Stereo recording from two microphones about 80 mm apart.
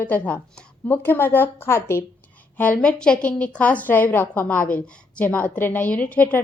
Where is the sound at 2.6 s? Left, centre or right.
Centre.